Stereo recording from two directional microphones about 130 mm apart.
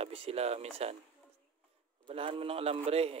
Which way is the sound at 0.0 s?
50° right (ahead or behind).